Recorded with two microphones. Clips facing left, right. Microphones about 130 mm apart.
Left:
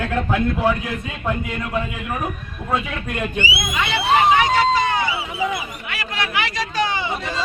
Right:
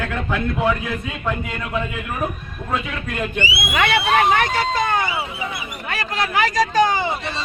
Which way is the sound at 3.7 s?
60° right (ahead or behind).